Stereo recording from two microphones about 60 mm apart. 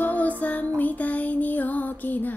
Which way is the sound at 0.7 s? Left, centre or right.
Left.